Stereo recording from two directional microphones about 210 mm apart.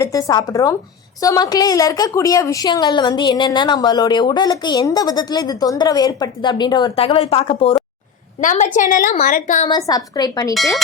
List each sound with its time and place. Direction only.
0.0 s a woman's voice: 15° left (ahead or behind); by 9.6 s 40° left (ahead or behind)
9.6 s a woman's voice: 20° left (ahead or behind)